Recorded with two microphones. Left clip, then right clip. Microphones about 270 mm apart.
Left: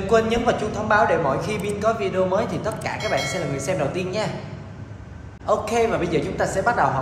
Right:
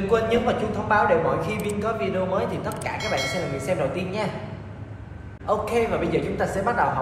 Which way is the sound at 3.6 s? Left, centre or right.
Left.